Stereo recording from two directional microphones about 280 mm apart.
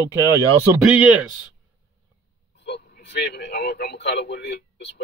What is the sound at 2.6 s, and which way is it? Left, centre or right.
Speech, left.